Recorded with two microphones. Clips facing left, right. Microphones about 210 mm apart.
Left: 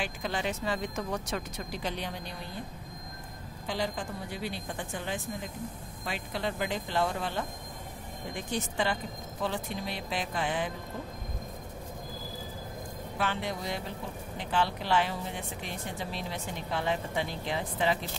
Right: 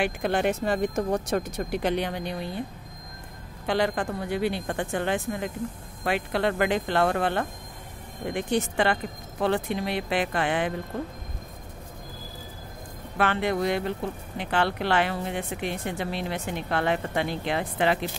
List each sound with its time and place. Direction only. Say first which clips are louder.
0.0 s speech: right 8 dB; 60° right (ahead or behind)
3.6 s speech: right 8 dB; 65° right (ahead or behind)
13.2 s speech: right 9 dB; 65° right (ahead or behind)